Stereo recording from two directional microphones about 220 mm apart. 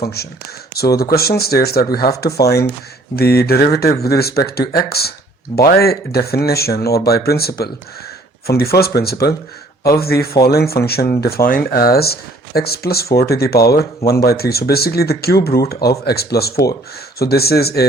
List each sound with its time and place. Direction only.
0.0 s speech: 45° left (ahead or behind)